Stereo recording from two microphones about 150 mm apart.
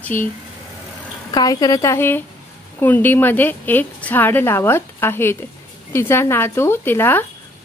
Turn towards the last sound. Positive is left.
turn(degrees=15)  # may be behind; listen again after turning